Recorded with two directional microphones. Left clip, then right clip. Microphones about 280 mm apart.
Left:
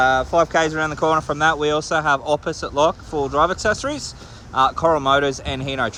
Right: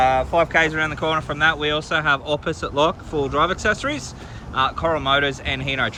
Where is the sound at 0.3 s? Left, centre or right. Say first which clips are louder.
Even; centre.